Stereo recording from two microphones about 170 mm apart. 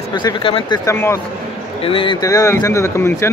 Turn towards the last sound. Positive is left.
turn(degrees=15)  # may be behind; listen again after turning